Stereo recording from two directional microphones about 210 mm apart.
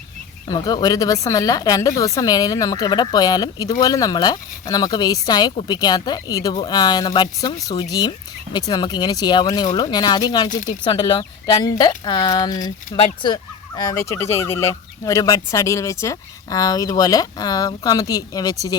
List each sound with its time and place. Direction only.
0.4 s speech: 20° left (ahead or behind)